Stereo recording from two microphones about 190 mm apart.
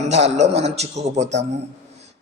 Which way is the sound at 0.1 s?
35° right (ahead or behind).